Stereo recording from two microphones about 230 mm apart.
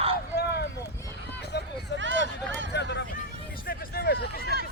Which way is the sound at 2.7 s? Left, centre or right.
Left.